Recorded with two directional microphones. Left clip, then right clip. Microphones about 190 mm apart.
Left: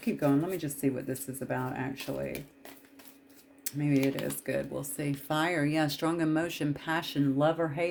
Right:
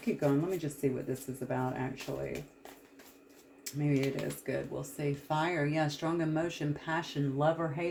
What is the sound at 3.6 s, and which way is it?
Speech, 45° left (ahead or behind).